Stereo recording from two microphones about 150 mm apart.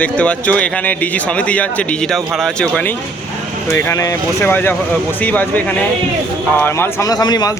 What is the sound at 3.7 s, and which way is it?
A man's voice, 20° left (ahead or behind).